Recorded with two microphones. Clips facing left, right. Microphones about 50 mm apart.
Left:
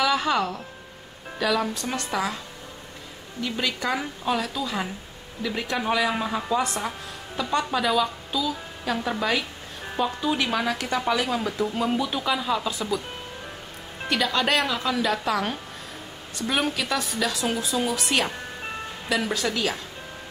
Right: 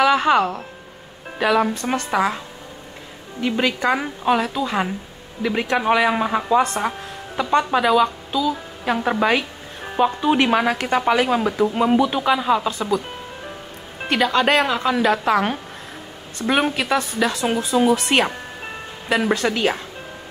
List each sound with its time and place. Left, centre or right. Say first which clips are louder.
0.0 s speech: right 7 dB; right
8.8 s speech: right 7 dB; right
14.0 s speech: right 6 dB; right
17.9 s speech: right 6 dB; right
19.0 s speech: right 6 dB; right